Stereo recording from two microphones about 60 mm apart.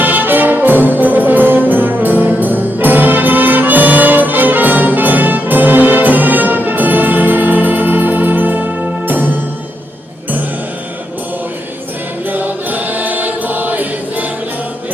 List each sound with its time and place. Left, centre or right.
0.0 s music: right
12.3 s choir: right